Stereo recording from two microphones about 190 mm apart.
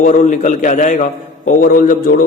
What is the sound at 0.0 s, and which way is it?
A man's voice, 40° left (ahead or behind).